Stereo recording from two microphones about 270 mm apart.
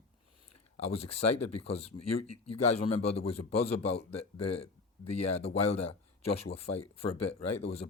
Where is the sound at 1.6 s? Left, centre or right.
Left.